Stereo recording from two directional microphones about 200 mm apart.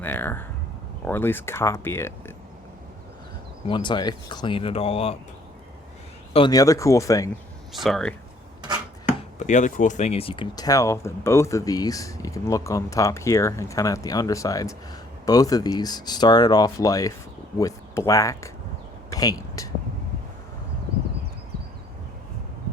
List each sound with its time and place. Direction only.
0.0 s speech: 10° left (ahead or behind)
3.7 s speech: 25° left (ahead or behind)
6.3 s speech: 20° left (ahead or behind)
7.7 s speech: centre (ahead or behind)
9.4 s speech: 40° left (ahead or behind); by 18.5 s 15° left (ahead or behind)
19.1 s a sound: 20° left (ahead or behind)